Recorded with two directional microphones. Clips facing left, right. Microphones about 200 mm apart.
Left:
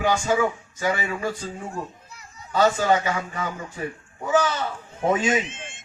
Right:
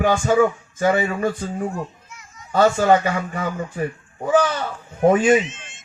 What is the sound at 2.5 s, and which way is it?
Speech, 50° right (ahead or behind).